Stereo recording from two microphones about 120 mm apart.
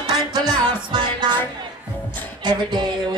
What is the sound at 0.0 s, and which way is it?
Music, 35° right (ahead or behind).